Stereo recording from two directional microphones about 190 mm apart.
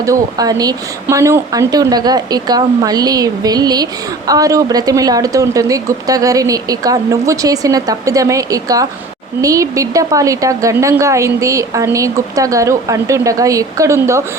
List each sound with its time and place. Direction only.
0.0 s a woman's voice: 20° right (ahead or behind)